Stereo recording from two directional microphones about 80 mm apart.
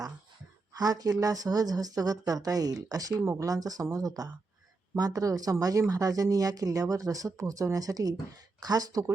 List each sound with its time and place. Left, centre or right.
0.7 s speech: right
3.2 s speech: right
3.4 s speech: right